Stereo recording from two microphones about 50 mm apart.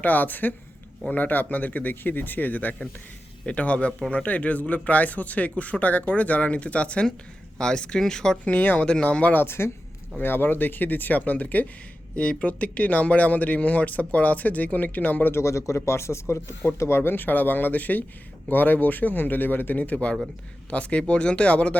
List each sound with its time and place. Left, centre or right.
0.0 s speech: left; by 8.4 s centre
8.4 s speech: left
8.9 s speech: left
9.3 s speech: left
15.3 s speech: left